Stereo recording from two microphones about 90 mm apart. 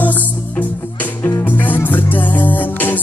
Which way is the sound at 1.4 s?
20° left (ahead or behind).